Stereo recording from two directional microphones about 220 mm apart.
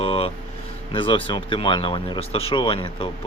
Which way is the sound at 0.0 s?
25° left (ahead or behind).